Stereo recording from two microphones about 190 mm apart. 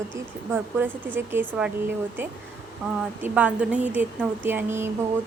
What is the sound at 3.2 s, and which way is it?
A woman's voice, 10° right (ahead or behind).